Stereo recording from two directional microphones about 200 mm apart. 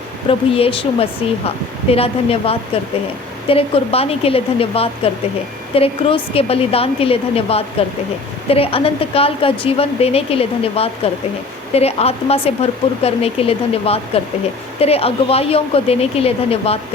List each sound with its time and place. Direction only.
0.3 s a woman's voice: 25° left (ahead or behind)